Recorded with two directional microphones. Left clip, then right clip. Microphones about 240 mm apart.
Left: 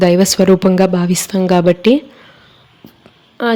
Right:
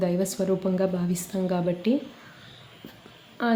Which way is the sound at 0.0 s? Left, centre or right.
Left.